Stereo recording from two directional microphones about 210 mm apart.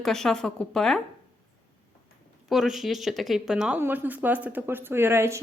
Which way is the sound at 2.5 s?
Centre (ahead or behind).